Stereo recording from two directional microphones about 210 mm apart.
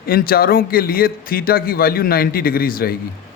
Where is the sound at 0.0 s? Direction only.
45° left (ahead or behind).